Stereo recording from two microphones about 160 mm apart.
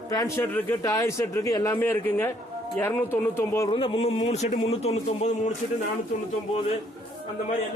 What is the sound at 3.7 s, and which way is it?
Speech, 35° left (ahead or behind).